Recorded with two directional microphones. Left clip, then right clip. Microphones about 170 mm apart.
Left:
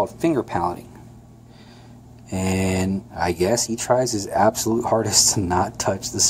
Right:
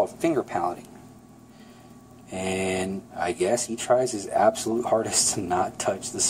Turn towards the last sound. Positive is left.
turn(degrees=25)  # may be behind; listen again after turning